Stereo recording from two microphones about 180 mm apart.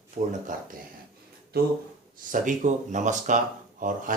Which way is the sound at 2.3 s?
45° right (ahead or behind).